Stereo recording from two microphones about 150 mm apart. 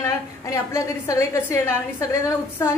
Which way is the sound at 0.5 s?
20° left (ahead or behind).